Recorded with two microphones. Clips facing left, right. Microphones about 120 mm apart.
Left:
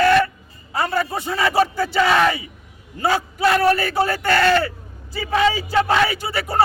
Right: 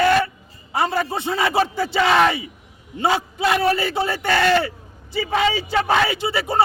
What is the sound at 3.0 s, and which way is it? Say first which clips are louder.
Speech: left 1 dB; 25° right (ahead or behind).